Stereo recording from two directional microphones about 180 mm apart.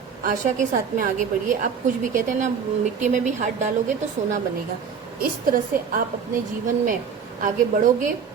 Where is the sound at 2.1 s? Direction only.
45° right (ahead or behind).